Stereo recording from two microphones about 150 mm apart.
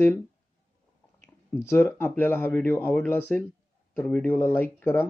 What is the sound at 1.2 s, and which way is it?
Speech, 15° left (ahead or behind).